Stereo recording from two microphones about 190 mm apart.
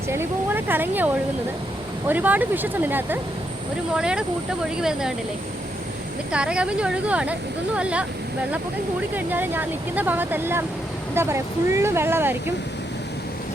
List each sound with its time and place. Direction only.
0.1 s speech: 10° right (ahead or behind)
6.3 s speech: 5° right (ahead or behind)
9.1 s speech: 10° right (ahead or behind)